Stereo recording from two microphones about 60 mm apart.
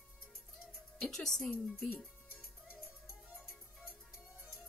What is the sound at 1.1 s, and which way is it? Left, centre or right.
Speech, centre.